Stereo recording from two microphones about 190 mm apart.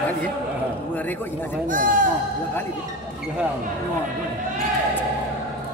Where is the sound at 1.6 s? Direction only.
45° right (ahead or behind).